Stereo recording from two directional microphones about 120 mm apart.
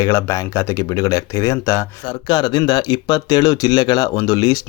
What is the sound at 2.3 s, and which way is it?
Speech, 35° left (ahead or behind).